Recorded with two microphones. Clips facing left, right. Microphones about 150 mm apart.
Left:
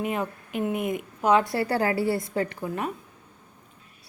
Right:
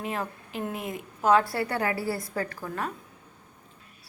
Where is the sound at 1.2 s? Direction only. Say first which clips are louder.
Even; 15° left (ahead or behind).